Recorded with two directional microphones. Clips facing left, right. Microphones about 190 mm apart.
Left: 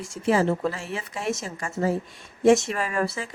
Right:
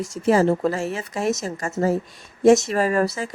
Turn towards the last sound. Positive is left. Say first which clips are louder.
# right 6 dB
turn(degrees=-40)  # may be behind; listen again after turning